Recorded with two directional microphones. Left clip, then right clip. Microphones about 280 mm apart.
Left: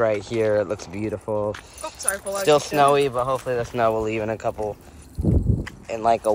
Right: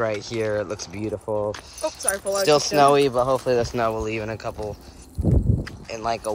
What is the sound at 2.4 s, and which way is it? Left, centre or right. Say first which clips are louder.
Speech: even; centre.